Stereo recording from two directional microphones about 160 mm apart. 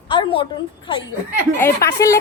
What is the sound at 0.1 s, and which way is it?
Speech, 30° left (ahead or behind).